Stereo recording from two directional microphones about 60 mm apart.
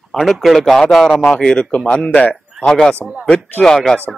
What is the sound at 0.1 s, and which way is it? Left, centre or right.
A man's voice, centre.